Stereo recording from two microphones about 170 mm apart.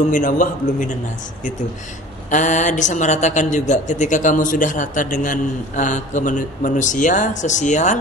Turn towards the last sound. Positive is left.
turn(degrees=45)  # may be behind; listen again after turning